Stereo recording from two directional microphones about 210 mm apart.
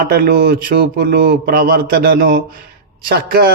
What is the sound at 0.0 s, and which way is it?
Speech, 50° right (ahead or behind).